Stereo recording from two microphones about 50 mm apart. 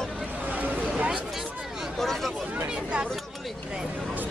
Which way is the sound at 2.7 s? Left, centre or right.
Right.